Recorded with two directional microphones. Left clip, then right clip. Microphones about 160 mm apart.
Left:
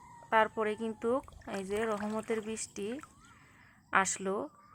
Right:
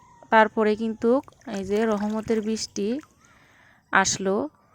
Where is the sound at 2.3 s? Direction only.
30° right (ahead or behind).